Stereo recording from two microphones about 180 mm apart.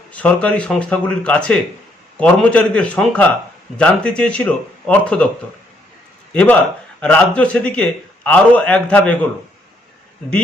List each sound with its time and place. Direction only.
0.1 s a man's voice: 5° left (ahead or behind)
6.3 s a man's voice: 5° left (ahead or behind)